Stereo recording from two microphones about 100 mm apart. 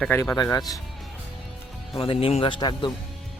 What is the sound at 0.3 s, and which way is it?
Speech, 40° left (ahead or behind).